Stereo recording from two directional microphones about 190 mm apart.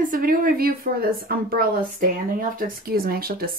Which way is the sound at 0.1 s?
50° right (ahead or behind).